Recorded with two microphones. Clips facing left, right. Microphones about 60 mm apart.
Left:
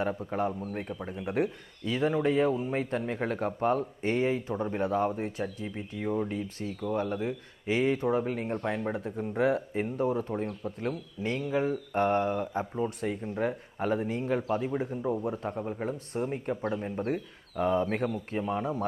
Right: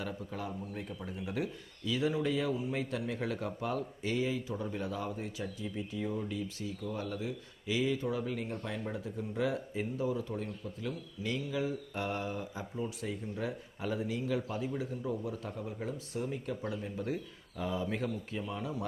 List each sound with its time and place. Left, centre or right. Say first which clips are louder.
0.0 s speech: left 10 dB; left